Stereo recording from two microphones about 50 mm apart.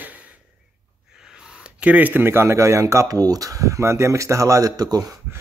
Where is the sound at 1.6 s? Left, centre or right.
Right.